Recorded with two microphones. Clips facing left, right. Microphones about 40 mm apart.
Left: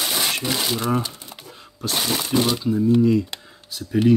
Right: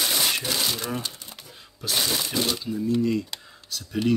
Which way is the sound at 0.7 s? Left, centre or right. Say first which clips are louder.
Left 7 dB; centre.